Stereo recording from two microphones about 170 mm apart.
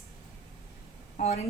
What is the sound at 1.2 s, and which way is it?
Speech, 40° left (ahead or behind).